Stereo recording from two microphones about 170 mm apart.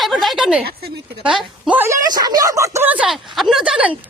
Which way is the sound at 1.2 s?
5° right (ahead or behind).